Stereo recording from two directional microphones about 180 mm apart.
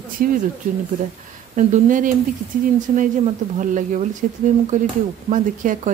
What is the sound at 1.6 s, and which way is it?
Speech, 45° right (ahead or behind).